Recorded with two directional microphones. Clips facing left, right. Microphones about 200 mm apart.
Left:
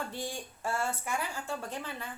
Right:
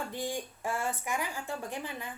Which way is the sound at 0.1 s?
15° right (ahead or behind).